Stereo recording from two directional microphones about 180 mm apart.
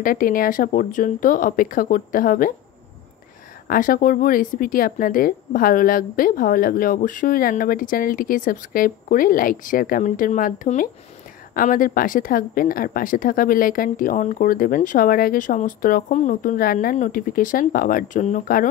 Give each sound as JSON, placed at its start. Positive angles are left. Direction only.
{"t": 0.0, "sound": "speech", "side_deg": 50}
{"t": 3.6, "sound": "speech", "side_deg": 50}